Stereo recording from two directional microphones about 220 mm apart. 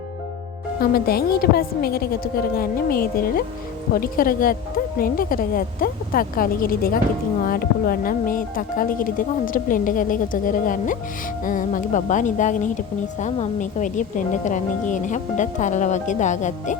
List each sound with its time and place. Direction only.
0.8 s a woman's voice: 45° left (ahead or behind)